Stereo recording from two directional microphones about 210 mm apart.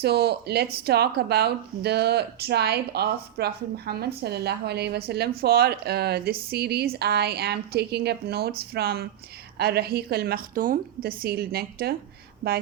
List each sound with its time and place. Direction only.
0.0 s speech: 50° right (ahead or behind)